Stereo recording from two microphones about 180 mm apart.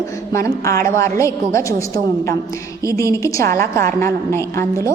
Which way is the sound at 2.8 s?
15° left (ahead or behind).